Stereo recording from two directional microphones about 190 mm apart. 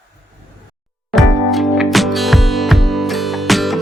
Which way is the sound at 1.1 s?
Centre (ahead or behind).